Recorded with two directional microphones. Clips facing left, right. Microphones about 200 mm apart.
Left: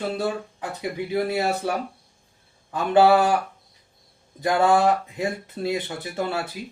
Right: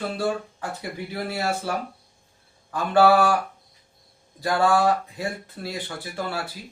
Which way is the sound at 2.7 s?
20° left (ahead or behind).